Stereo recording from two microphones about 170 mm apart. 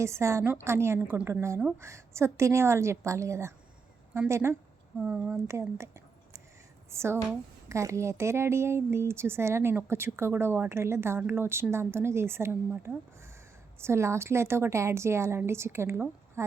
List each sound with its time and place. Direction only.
0.0 s speech: 15° right (ahead or behind)
4.9 s speech: 5° right (ahead or behind)
5.5 s a sound: 15° right (ahead or behind)
6.9 s speech: 15° right (ahead or behind)